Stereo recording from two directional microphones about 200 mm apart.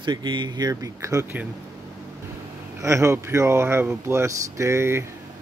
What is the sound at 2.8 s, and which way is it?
Speech, 15° right (ahead or behind).